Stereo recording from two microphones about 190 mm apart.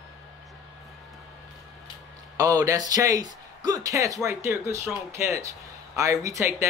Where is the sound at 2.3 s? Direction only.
15° right (ahead or behind).